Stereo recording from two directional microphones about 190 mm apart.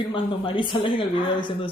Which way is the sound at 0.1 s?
25° left (ahead or behind).